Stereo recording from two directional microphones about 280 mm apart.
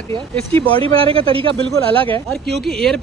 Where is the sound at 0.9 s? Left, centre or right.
Centre.